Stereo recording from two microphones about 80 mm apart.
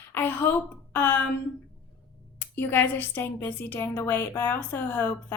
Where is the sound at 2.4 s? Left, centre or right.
Left.